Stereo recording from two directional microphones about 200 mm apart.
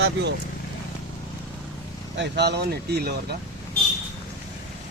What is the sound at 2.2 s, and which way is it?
Speech, 60° right (ahead or behind).